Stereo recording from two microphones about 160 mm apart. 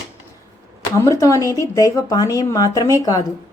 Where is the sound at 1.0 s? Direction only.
20° left (ahead or behind).